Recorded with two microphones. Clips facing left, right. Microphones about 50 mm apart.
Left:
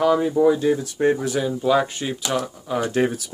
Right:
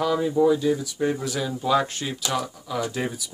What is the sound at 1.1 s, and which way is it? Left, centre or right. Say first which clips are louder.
Speech: left 6 dB; left.